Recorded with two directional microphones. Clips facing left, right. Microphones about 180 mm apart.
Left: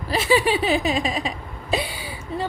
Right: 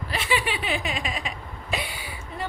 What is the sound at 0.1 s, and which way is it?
Speech, 35° left (ahead or behind).